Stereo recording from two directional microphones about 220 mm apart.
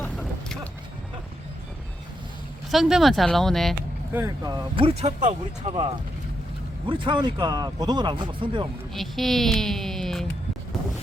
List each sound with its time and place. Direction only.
0.0 s vehicle: 5° left (ahead or behind)
2.6 s speech: centre (ahead or behind)
4.1 s speech: 15° right (ahead or behind)
8.9 s speech: centre (ahead or behind)